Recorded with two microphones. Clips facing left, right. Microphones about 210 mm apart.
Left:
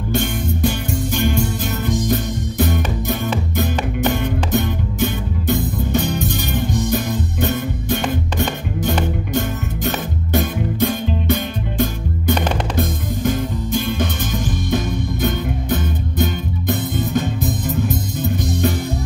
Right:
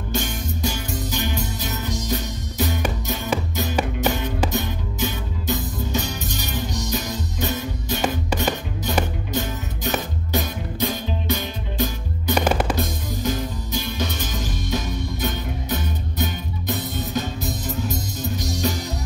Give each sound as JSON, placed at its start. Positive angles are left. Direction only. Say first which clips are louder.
{"t": 0.1, "sound": "music", "louder": "left 6 dB", "side_deg": 55}
{"t": 4.5, "sound": "music", "louder": "left 6 dB", "side_deg": 55}
{"t": 12.4, "sound": "music", "louder": "right 1 dB", "side_deg": -10}
{"t": 12.7, "sound": "music", "louder": "left 5 dB", "side_deg": 50}